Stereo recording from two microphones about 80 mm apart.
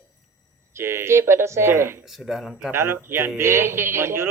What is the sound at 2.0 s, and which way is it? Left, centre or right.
Speech, centre.